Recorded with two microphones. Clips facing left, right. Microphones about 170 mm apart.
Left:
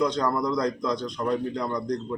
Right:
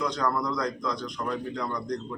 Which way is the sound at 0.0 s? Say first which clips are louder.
Left 4 dB; 30° left (ahead or behind).